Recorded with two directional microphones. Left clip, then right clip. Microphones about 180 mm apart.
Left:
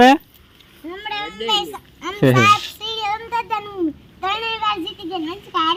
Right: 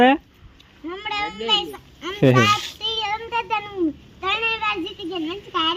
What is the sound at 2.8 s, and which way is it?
Child singing, 20° left (ahead or behind).